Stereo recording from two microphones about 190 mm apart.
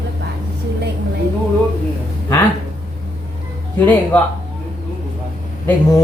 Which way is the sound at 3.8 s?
10° left (ahead or behind).